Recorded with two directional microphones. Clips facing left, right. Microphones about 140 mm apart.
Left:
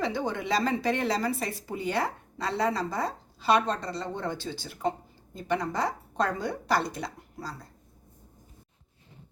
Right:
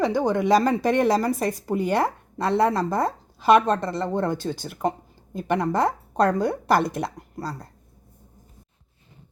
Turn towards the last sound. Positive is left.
turn(degrees=-55)  # may be behind; listen again after turning